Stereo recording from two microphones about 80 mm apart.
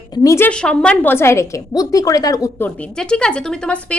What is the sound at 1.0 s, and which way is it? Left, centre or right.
Speech, left.